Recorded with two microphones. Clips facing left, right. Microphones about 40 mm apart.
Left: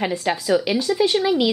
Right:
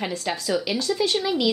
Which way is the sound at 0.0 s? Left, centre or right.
Centre.